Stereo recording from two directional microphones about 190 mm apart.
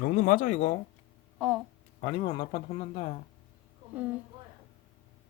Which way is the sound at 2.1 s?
30° left (ahead or behind).